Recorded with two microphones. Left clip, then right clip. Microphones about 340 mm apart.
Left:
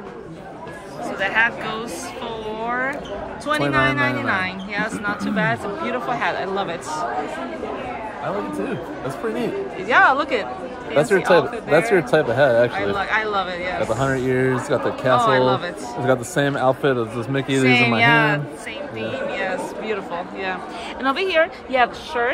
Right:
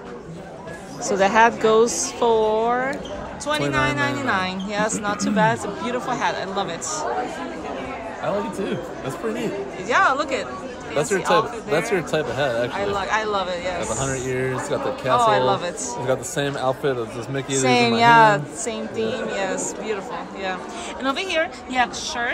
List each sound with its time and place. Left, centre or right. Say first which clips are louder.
1.2 s speech: right 4 dB; centre
9.8 s speech: left 3 dB; centre
11.1 s speech: left 2 dB; centre
12.9 s speech: left 1 dB; centre
14.0 s speech: left 5 dB; centre
15.2 s speech: left 1 dB; centre
16.1 s speech: left 4 dB; centre
17.5 s speech: left 1 dB; centre
21.0 s speech: left 4 dB; centre